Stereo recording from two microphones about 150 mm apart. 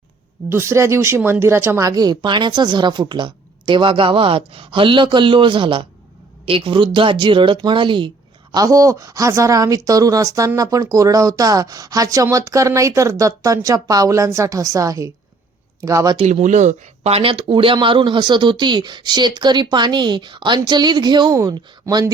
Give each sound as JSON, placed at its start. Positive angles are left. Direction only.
{"t": 0.5, "sound": "speech", "side_deg": -15}
{"t": 8.5, "sound": "speech", "side_deg": -25}
{"t": 16.1, "sound": "speech", "side_deg": -50}